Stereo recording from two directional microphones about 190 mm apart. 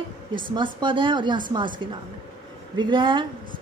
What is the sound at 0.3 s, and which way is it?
A woman's voice, 25° right (ahead or behind).